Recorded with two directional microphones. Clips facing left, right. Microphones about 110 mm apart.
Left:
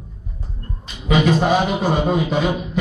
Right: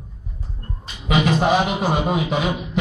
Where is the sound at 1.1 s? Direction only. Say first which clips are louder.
Left 2 dB; 10° right (ahead or behind).